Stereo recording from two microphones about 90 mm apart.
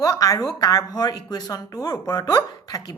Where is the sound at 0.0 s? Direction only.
45° left (ahead or behind).